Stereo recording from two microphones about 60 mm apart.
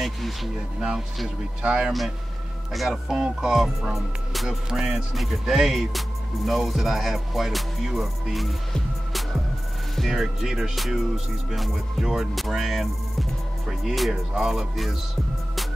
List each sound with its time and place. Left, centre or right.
0.0 s music: centre
0.7 s speech: centre
1.9 s music: centre
3.1 s speech: centre
3.3 s music: centre